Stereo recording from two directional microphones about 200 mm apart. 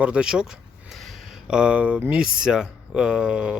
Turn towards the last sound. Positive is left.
turn(degrees=-5)  # may be behind; listen again after turning